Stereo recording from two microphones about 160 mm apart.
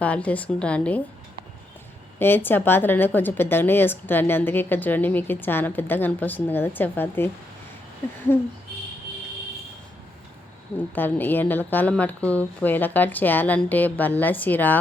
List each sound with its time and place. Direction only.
0.0 s speech: 10° left (ahead or behind)
2.1 s speech: 15° left (ahead or behind)
8.3 s speech: 15° left (ahead or behind)
10.9 s speech: 10° left (ahead or behind)